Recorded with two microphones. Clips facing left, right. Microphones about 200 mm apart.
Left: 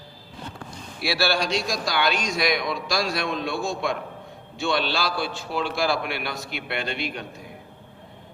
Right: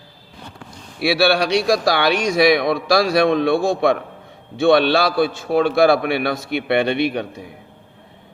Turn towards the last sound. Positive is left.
turn(degrees=-65)  # may be behind; listen again after turning